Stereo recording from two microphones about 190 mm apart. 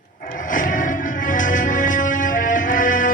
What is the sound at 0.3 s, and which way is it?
Music, 45° left (ahead or behind).